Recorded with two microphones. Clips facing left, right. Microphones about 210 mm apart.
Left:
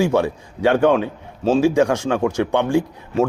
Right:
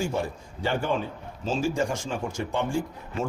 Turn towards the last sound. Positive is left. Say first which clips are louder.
# left 10 dB
turn(degrees=70)  # may be behind; listen again after turning